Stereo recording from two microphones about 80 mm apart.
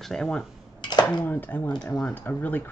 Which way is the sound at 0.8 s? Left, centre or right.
Left.